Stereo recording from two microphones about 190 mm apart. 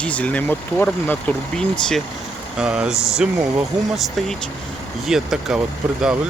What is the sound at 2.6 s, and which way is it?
Speech, 5° right (ahead or behind).